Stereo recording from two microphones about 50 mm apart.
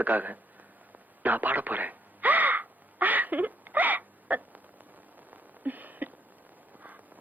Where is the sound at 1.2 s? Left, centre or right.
Right.